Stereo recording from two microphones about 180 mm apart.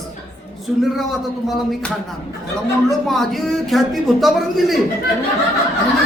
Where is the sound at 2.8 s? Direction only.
Centre (ahead or behind).